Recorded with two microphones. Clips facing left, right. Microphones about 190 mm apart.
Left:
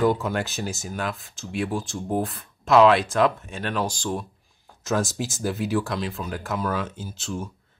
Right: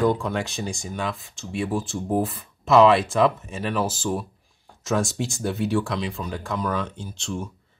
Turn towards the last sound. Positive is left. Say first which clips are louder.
# right 1 dB
turn(degrees=0)  # may be behind; listen again after turning